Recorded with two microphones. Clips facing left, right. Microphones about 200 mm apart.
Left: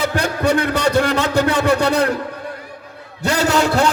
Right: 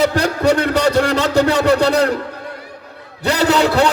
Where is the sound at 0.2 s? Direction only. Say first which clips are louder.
Right 2 dB; 55° left (ahead or behind).